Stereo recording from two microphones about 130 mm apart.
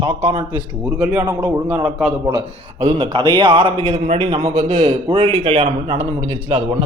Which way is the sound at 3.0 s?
40° right (ahead or behind).